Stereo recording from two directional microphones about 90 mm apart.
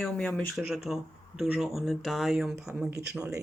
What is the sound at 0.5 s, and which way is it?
Speech, centre (ahead or behind).